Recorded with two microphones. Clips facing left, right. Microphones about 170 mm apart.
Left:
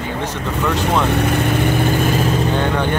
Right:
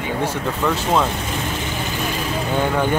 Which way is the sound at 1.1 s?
60° left (ahead or behind).